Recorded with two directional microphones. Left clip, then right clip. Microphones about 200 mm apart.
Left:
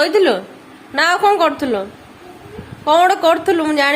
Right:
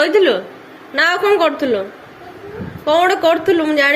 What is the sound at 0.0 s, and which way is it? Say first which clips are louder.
A woman's voice: right 1 dB; 25° left (ahead or behind).